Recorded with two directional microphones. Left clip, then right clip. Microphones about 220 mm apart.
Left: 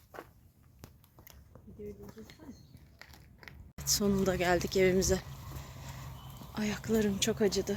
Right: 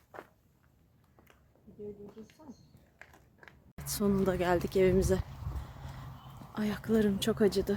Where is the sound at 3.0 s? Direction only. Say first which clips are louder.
Left 2 dB; 10° right (ahead or behind).